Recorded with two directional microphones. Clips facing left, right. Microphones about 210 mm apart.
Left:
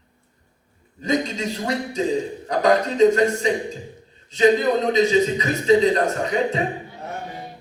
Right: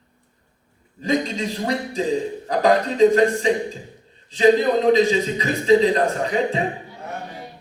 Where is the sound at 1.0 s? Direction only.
30° right (ahead or behind).